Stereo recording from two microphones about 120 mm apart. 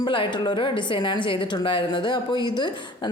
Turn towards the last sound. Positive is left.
turn(degrees=40)  # may be behind; listen again after turning